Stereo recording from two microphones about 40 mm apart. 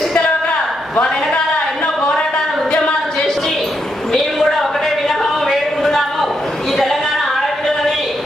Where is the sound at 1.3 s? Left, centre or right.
Left.